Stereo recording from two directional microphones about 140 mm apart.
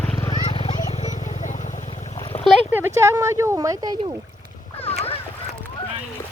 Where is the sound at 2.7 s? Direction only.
15° right (ahead or behind).